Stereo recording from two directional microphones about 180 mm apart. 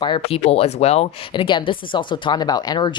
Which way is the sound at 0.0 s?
30° left (ahead or behind).